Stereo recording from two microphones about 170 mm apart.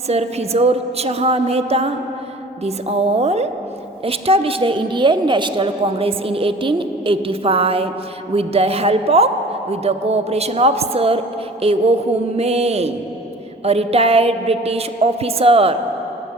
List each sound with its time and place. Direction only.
0.1 s a woman's voice: 40° right (ahead or behind)